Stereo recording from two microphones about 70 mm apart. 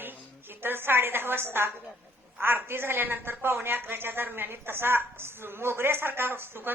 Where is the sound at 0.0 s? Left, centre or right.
Right.